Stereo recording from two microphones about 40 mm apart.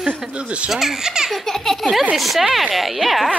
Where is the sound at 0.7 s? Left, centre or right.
Centre.